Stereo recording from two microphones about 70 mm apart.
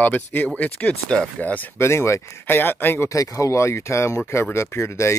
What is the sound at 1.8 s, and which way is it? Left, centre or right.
Speech, left.